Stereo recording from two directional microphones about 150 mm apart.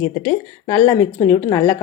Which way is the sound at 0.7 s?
25° left (ahead or behind).